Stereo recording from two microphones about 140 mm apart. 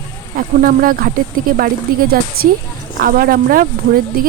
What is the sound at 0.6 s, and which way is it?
Speech, 90° right.